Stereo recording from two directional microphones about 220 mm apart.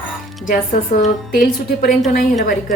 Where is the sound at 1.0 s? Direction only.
40° left (ahead or behind).